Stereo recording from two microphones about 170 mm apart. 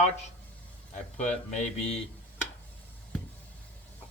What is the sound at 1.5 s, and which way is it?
Speech, 45° left (ahead or behind).